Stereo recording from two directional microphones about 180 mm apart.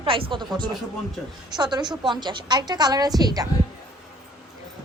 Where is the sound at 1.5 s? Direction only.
25° right (ahead or behind).